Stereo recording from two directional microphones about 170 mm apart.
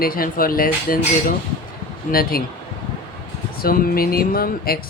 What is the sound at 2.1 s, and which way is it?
Speech, 60° left (ahead or behind).